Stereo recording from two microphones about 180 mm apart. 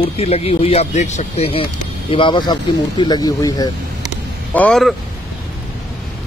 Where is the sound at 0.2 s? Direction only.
35° left (ahead or behind).